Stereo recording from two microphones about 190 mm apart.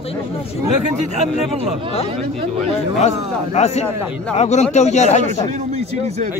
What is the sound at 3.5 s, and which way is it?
Speech, 35° left (ahead or behind).